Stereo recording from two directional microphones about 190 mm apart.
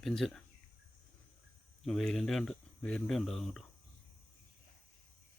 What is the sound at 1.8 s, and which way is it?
Speech, centre (ahead or behind).